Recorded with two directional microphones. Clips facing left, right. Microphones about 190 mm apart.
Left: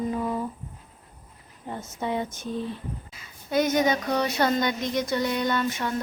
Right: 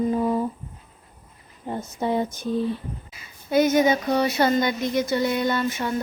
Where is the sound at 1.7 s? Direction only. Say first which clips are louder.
Right 5 dB; 35° right (ahead or behind).